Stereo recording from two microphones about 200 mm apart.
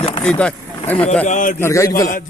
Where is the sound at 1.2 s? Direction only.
40° left (ahead or behind).